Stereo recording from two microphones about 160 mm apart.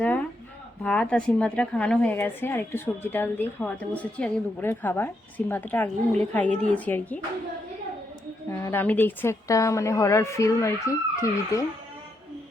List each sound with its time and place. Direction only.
0.0 s a woman's voice: 10° left (ahead or behind)
8.4 s a woman's voice: 15° left (ahead or behind)